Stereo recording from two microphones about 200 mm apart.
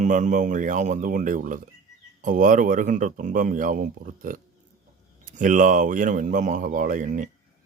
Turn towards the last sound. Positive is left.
turn(degrees=-40)  # may be behind; listen again after turning